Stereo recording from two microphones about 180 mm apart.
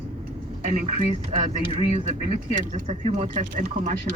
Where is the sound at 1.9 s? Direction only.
40° right (ahead or behind).